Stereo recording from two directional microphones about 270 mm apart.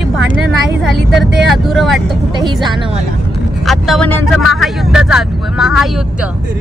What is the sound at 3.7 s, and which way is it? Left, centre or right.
Speech, centre.